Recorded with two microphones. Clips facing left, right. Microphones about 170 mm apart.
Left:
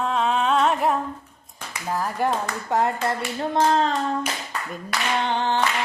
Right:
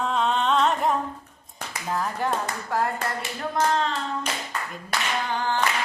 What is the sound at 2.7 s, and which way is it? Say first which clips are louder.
A child's voice: left 4 dB; 25° left (ahead or behind).